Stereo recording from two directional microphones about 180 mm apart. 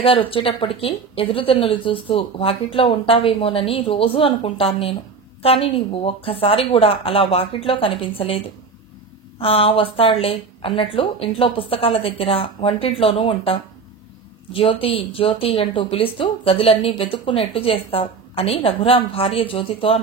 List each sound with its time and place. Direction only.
0.0 s speech: 30° left (ahead or behind)
9.4 s speech: 30° left (ahead or behind)